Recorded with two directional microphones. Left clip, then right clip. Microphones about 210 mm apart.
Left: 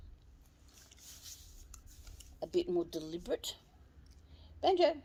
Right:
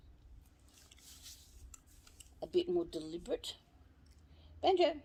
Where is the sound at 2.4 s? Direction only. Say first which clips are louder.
Even; 40° left (ahead or behind).